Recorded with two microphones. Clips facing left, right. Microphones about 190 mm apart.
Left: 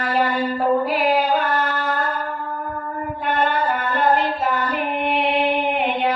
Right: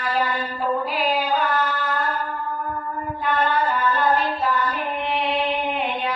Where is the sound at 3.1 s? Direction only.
60° left (ahead or behind).